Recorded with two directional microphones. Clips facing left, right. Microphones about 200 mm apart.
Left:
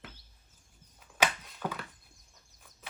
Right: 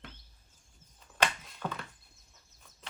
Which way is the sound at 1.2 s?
Centre (ahead or behind).